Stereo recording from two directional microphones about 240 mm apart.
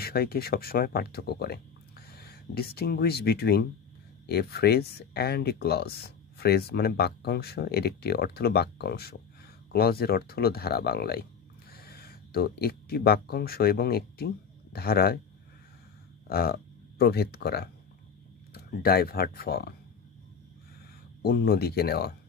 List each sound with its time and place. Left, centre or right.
0.0 s speech: left
16.3 s speech: left
21.2 s speech: left